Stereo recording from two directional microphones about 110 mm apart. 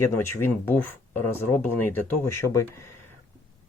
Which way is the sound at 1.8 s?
20° left (ahead or behind).